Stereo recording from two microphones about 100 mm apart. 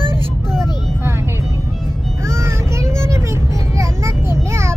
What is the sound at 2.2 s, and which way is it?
Vehicle, 25° right (ahead or behind).